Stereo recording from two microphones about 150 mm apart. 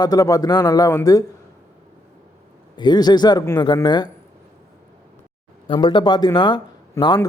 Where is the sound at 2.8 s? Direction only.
30° left (ahead or behind).